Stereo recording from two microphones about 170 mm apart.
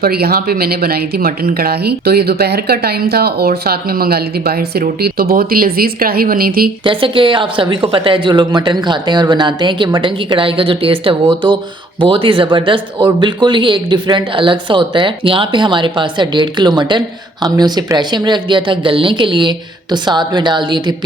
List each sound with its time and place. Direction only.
0.0 s speech: 65° right (ahead or behind)
6.8 s speech: 30° right (ahead or behind)